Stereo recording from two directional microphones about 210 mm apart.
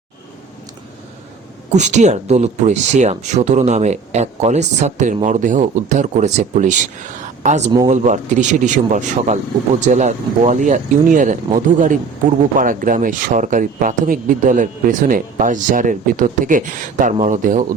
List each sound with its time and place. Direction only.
1.7 s speech: 35° right (ahead or behind)
7.9 s speech: 35° right (ahead or behind)